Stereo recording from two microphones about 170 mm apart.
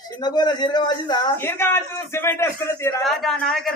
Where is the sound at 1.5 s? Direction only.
15° left (ahead or behind).